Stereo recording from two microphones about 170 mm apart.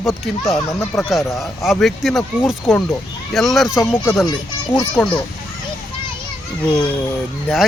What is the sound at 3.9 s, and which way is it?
Speech, 15° left (ahead or behind).